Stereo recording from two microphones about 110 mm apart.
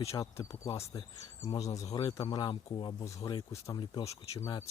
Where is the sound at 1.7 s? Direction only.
30° left (ahead or behind).